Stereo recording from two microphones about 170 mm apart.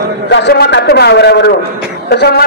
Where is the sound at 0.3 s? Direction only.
90° left.